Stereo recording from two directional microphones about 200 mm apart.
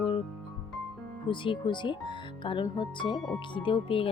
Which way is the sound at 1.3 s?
25° left (ahead or behind).